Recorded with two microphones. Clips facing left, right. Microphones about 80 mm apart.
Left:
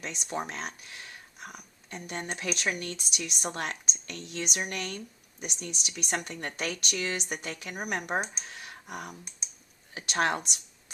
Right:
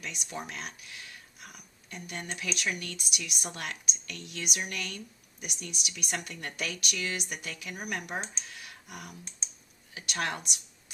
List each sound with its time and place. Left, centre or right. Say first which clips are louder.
0.0 s speech: left 5 dB; left
8.4 s a sound: left 4 dB; left
9.4 s computer keyboard: even; centre
9.9 s speech: left 6 dB; left